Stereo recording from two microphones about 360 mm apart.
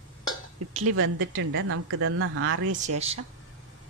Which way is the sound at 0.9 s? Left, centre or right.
Right.